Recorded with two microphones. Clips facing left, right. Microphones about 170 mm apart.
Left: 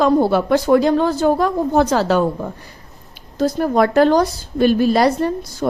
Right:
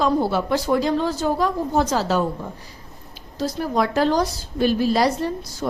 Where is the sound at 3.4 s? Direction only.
55° left (ahead or behind).